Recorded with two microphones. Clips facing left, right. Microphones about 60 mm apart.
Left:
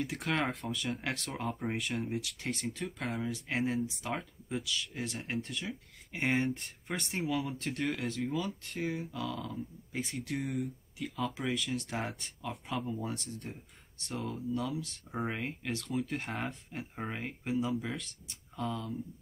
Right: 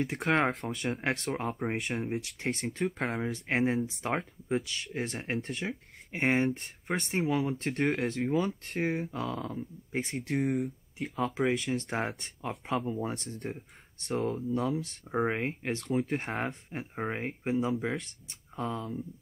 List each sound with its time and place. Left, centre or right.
0.0 s speech: right
0.7 s speech: right
1.8 s speech: right
2.1 s speech: right
2.5 s speech: right
3.3 s speech: right
7.1 s speech: right
8.0 s speech: right
11.1 s speech: right